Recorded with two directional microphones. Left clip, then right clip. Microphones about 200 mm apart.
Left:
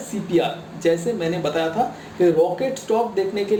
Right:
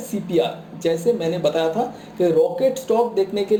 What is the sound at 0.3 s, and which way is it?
A woman's voice, 45° right (ahead or behind).